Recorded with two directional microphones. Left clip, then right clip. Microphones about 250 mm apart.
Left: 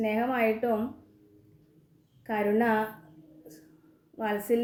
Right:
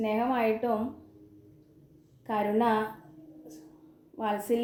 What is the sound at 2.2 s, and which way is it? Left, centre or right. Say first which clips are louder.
Speech: even; centre.